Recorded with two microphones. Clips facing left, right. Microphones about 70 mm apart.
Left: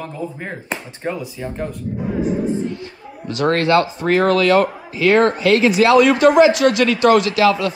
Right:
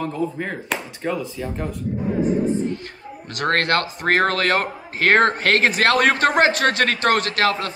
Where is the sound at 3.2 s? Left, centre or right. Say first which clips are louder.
Left 4 dB; right.